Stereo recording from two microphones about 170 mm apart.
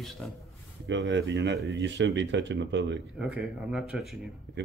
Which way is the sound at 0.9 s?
90° right.